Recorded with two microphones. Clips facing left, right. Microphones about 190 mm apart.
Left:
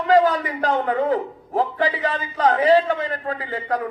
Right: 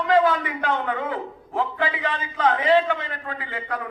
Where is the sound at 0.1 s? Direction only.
40° left (ahead or behind).